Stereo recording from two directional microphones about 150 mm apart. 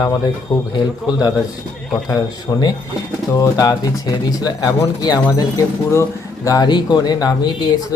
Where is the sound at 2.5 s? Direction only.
30° left (ahead or behind).